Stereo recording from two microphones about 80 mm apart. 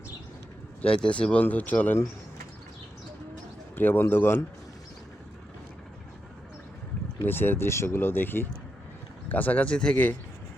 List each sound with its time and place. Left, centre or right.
0.8 s speech: centre
3.8 s speech: left
7.3 s speech: left